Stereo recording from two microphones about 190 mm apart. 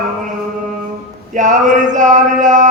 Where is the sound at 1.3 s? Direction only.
40° right (ahead or behind).